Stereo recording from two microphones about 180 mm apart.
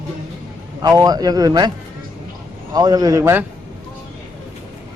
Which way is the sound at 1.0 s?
20° right (ahead or behind).